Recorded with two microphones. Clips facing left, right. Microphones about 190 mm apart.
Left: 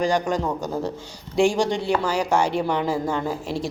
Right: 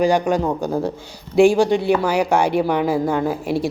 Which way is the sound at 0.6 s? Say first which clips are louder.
Right 5 dB; 55° right (ahead or behind).